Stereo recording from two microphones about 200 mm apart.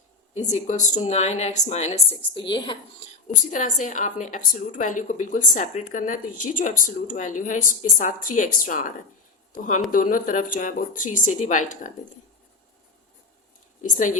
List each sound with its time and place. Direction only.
0.3 s a woman's voice: 35° left (ahead or behind)
3.2 s a woman's voice: 40° left (ahead or behind)
13.8 s a woman's voice: 40° left (ahead or behind)